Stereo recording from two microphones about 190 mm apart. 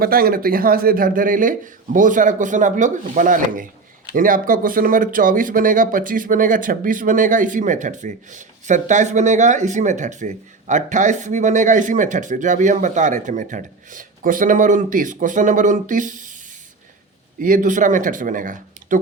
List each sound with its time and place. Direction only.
0.0 s speech: 50° right (ahead or behind)
17.4 s speech: 45° right (ahead or behind)